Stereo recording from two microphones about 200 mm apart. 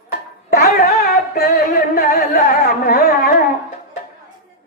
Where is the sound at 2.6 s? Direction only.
50° left (ahead or behind).